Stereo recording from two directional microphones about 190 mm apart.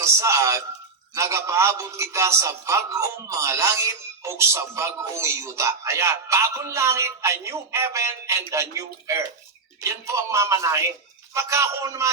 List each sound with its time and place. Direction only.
0.0 s a man's voice: 15° right (ahead or behind)